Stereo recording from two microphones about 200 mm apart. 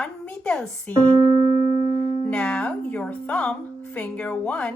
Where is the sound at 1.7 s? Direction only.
45° left (ahead or behind).